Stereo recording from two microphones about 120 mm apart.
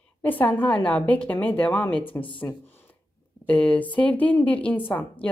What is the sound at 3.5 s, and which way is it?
A woman's voice, 10° left (ahead or behind).